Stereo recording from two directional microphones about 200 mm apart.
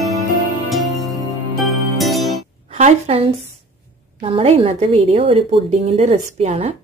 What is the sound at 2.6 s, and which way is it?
A woman's voice, 35° right (ahead or behind).